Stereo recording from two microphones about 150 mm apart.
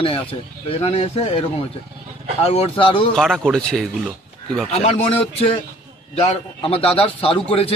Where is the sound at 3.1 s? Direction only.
Centre (ahead or behind).